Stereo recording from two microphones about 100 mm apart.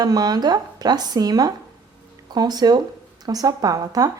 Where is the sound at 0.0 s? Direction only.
40° right (ahead or behind).